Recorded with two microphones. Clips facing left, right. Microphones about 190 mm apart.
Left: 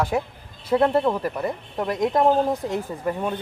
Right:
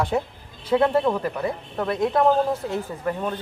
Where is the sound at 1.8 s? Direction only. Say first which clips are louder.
Even; 15° left (ahead or behind).